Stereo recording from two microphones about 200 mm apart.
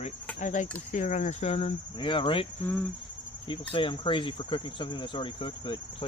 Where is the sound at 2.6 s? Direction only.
5° left (ahead or behind).